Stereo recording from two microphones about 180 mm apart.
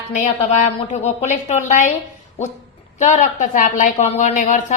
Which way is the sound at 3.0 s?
40° left (ahead or behind).